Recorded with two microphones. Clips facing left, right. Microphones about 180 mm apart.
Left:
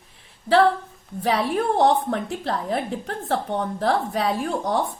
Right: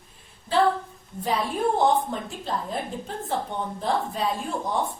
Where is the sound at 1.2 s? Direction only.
80° left.